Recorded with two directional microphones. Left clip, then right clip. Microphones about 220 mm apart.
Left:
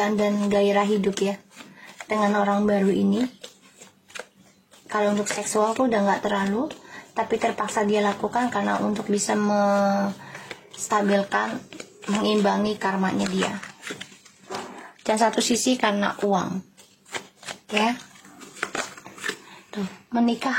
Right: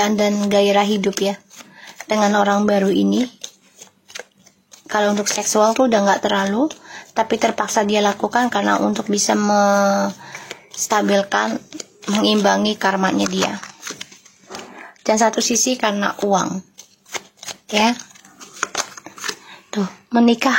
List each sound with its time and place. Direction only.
0.0 s speech: 35° right (ahead or behind)
4.8 s speech: 35° right (ahead or behind)
14.5 s speech: 15° right (ahead or behind)
17.1 s shuffling cards: 30° right (ahead or behind)
19.2 s a sound: 20° right (ahead or behind)